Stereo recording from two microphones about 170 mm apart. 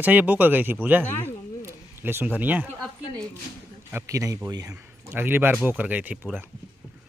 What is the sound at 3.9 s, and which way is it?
Speech, 20° right (ahead or behind).